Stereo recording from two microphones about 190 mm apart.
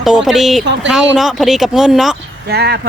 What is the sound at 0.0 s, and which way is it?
Speech, centre (ahead or behind).